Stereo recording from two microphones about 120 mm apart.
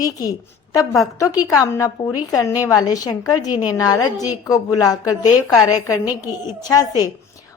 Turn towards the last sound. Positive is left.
turn(degrees=30)  # may be behind; listen again after turning